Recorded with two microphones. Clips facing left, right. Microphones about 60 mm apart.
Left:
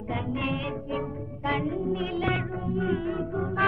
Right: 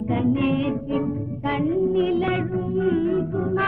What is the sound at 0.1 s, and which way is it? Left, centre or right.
Music, centre.